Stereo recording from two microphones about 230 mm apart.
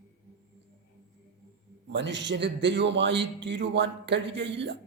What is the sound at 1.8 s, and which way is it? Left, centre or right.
A man's voice, right.